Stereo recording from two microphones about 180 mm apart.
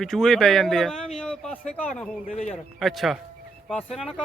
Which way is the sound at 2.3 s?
35° left (ahead or behind).